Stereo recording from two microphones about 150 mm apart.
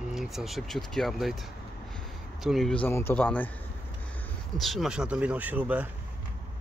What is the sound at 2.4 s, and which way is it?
Speech, centre (ahead or behind).